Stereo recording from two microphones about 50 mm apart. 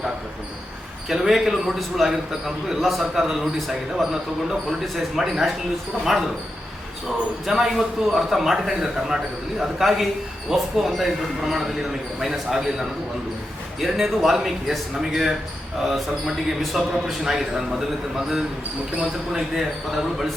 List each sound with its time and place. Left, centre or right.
1.1 s a man's voice: centre
7.4 s a man's voice: centre
13.7 s a man's voice: centre
18.9 s a man's voice: centre